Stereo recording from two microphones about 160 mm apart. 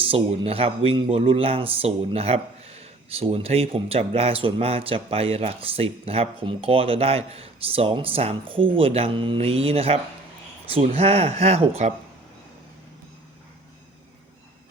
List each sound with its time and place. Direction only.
0.0 s speech: 35° right (ahead or behind)